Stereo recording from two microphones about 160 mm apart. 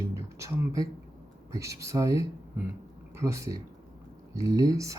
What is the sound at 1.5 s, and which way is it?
Speech, 20° right (ahead or behind).